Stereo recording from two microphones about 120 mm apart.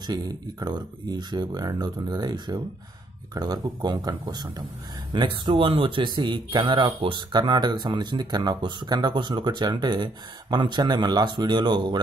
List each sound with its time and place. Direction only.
0.0 s speech: 35° right (ahead or behind)